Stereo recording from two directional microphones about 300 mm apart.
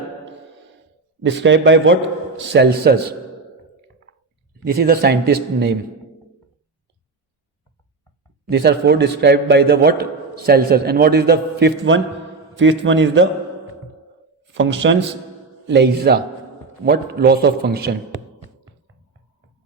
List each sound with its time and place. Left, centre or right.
1.2 s a man's voice: right
4.6 s a man's voice: right
8.4 s a man's voice: right
14.5 s a man's voice: right